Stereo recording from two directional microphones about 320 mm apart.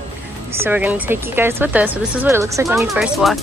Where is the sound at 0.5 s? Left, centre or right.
Centre.